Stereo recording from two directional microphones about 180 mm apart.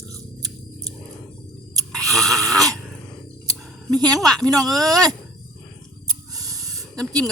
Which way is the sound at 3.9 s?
20° right (ahead or behind).